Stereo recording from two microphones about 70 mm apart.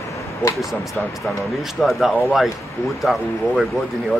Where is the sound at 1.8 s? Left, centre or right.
Centre.